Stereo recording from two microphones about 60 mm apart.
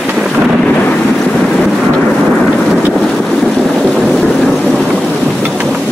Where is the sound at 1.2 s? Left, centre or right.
Centre.